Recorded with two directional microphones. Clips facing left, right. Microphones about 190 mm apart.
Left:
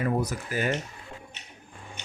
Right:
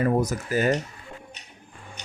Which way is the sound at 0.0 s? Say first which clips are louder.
Right 5 dB; 45° right (ahead or behind).